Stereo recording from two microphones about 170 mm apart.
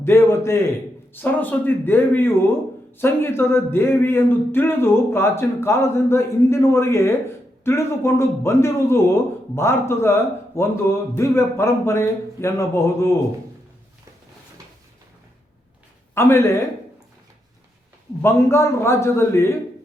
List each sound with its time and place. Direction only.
0.0 s a man's voice: 15° left (ahead or behind)
16.1 s a man's voice: 15° left (ahead or behind)
18.2 s a man's voice: 15° left (ahead or behind)